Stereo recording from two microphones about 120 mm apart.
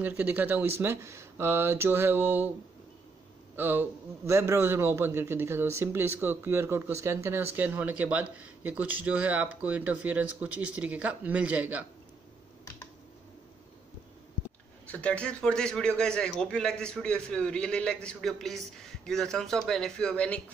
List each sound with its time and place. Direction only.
0.0 s a man's voice: 15° right (ahead or behind)
3.5 s a man's voice: 15° right (ahead or behind)
14.9 s a man's voice: 10° left (ahead or behind)